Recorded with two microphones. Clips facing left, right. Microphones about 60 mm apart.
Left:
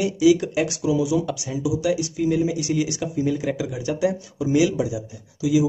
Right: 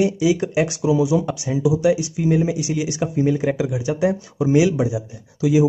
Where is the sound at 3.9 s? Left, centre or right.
Right.